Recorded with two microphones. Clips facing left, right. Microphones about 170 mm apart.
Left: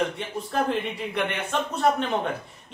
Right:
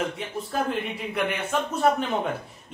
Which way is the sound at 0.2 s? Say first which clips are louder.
Left 1 dB; centre (ahead or behind).